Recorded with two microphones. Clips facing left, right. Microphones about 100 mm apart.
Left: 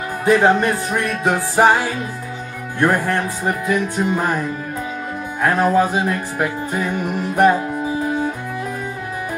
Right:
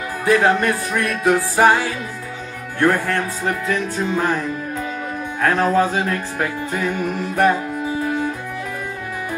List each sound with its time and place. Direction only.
0.2 s music: 25° left (ahead or behind)